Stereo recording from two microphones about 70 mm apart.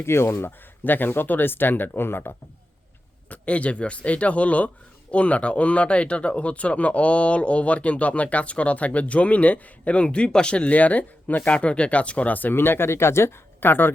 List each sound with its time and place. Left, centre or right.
0.0 s speech: left
3.2 s speech: centre